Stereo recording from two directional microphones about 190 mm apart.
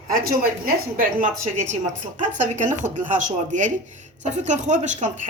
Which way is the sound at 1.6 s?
40° right (ahead or behind).